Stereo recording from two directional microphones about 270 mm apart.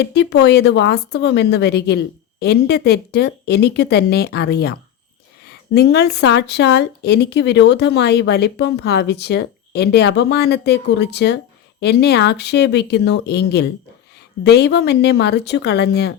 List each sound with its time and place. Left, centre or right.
0.0 s speech: left